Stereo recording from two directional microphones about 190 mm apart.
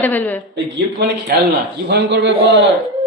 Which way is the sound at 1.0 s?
60° right (ahead or behind).